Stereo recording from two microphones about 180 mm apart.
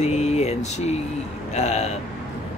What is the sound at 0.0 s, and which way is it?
Speech, 35° left (ahead or behind).